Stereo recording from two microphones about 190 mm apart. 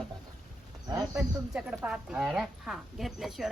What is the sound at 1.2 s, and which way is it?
Speech, centre (ahead or behind).